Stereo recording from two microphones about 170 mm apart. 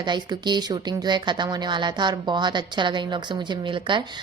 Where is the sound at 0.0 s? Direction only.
25° right (ahead or behind).